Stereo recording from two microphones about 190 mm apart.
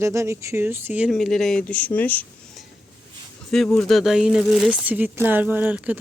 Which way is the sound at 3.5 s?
Centre (ahead or behind).